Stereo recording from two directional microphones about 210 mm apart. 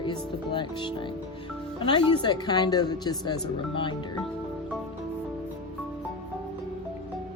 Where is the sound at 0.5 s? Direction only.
25° left (ahead or behind).